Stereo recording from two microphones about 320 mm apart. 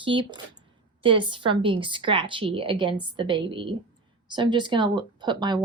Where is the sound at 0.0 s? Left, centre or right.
Centre.